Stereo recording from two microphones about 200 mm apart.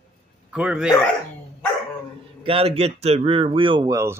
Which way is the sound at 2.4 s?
30° right (ahead or behind).